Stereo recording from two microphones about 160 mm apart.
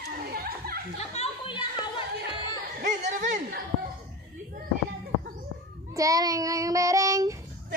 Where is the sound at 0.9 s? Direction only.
40° left (ahead or behind).